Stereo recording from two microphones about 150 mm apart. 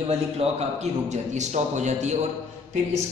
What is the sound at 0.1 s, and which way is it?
A man's voice, 45° right (ahead or behind).